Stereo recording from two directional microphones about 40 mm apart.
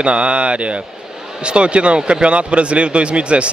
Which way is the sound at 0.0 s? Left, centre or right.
Right.